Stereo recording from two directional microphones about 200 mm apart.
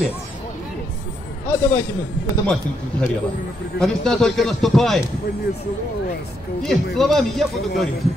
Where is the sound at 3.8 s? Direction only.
Centre (ahead or behind).